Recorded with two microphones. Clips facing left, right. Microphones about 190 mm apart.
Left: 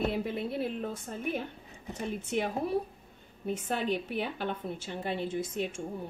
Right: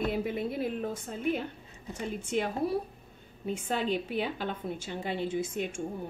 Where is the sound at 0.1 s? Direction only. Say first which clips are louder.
Right 1 dB; 10° right (ahead or behind).